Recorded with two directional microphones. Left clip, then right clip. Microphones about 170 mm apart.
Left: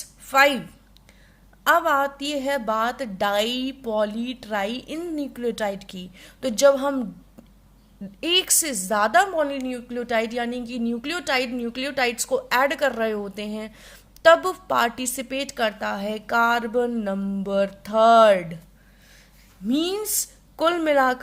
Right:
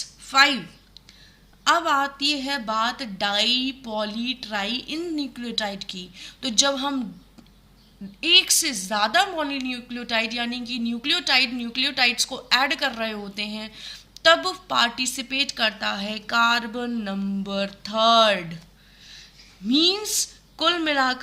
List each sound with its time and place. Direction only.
0.3 s speech: 55° left (ahead or behind)
1.6 s a woman's voice: 50° left (ahead or behind)
8.2 s a woman's voice: 45° left (ahead or behind)
19.6 s a woman's voice: 45° left (ahead or behind)